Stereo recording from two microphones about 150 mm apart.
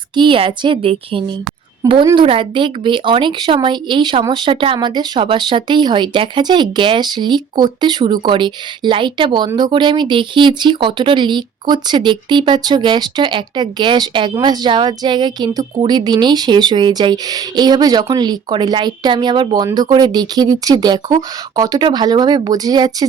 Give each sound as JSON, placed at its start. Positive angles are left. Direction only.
{"t": 0.2, "sound": "a woman's voice", "side_deg": -35}